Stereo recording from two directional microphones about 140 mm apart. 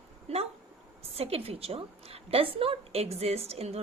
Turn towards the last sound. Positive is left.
turn(degrees=-45)  # may be behind; listen again after turning